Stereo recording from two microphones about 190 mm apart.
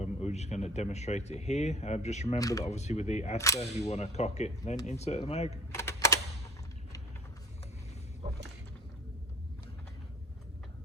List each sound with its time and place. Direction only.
0.0 s speech: 35° left (ahead or behind)
2.4 s speech: 20° left (ahead or behind)
2.6 s speech: 35° left (ahead or behind)
3.3 s speech: 15° left (ahead or behind)
3.6 s speech: 35° left (ahead or behind)
5.7 s typing: 15° left (ahead or behind)